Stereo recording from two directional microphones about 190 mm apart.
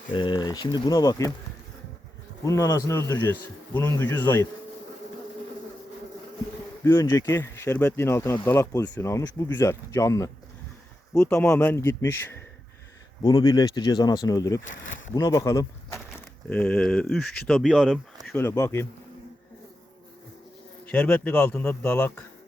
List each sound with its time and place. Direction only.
0.1 s speech: 25° left (ahead or behind)
2.4 s speech: 20° left (ahead or behind)
6.8 s speech: 15° left (ahead or behind)
16.5 s speech: 5° left (ahead or behind)
18.3 s speech: 10° left (ahead or behind)
20.8 s speech: 10° left (ahead or behind)